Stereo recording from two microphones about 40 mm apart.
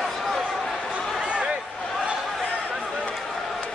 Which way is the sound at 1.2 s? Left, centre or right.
Right.